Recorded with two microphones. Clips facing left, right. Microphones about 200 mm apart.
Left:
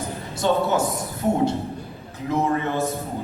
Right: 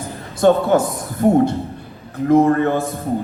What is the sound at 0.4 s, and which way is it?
A man's voice, 55° right (ahead or behind).